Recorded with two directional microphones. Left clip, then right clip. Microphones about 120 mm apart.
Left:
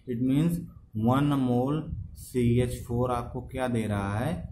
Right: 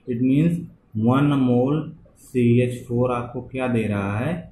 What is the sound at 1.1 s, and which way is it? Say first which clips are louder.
Speech: right 6 dB; 45° left (ahead or behind).